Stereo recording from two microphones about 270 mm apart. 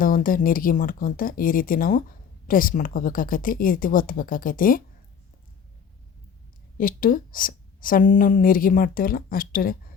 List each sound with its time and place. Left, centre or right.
0.0 s a woman's voice: left
6.7 s a woman's voice: left